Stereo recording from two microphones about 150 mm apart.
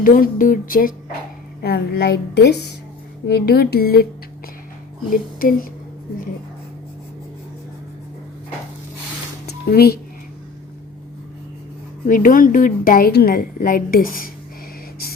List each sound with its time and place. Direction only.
0.0 s a woman's voice: 65° left (ahead or behind)
1.6 s a woman's voice: 90° left
5.1 s a woman's voice: 70° left (ahead or behind)
9.5 s speech: 90° left
12.0 s a woman's voice: 65° left (ahead or behind)